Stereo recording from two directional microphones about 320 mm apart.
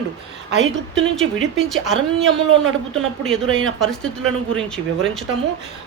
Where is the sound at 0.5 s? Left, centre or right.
Right.